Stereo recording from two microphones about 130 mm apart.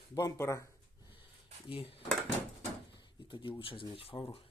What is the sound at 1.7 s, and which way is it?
Speech, 50° left (ahead or behind).